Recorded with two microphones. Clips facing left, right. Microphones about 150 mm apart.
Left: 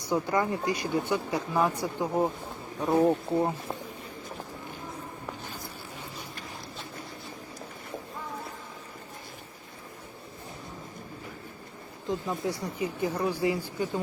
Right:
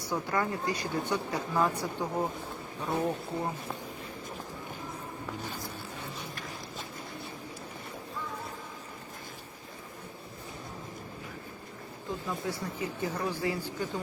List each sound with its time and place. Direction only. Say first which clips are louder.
0.1 s speech: left 4 dB; 15° left (ahead or behind)
2.9 s speech: left 8 dB; 25° left (ahead or behind)
12.0 s speech: left 4 dB; 15° left (ahead or behind)